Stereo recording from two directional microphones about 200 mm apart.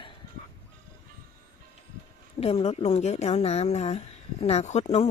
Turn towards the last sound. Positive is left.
turn(degrees=35)  # may be behind; listen again after turning